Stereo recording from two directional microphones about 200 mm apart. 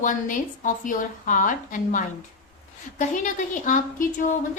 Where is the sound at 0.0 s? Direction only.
40° left (ahead or behind).